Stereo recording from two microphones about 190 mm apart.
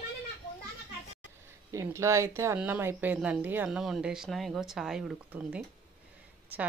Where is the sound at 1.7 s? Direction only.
15° right (ahead or behind).